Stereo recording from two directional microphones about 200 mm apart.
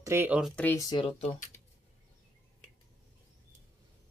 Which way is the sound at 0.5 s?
10° left (ahead or behind).